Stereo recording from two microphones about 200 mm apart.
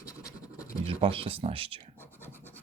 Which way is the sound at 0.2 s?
15° left (ahead or behind).